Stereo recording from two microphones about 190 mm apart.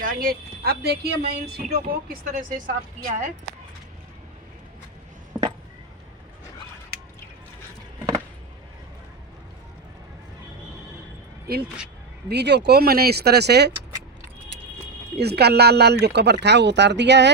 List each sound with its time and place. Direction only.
0.0 s a woman's voice: 50° right (ahead or behind)
5.3 s a sound: 5° right (ahead or behind)
12.3 s speech: 60° right (ahead or behind)
15.2 s speech: 60° right (ahead or behind)